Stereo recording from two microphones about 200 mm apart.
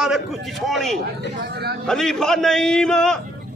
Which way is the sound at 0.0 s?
Centre (ahead or behind).